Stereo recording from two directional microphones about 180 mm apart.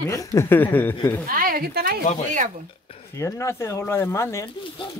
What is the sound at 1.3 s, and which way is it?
Speech, 55° right (ahead or behind).